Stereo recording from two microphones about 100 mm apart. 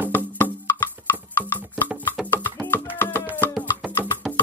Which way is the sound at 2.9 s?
20° left (ahead or behind).